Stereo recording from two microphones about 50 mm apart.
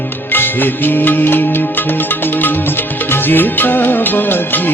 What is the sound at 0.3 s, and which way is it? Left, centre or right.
Music, left.